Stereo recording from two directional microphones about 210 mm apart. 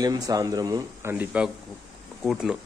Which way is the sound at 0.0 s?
15° right (ahead or behind).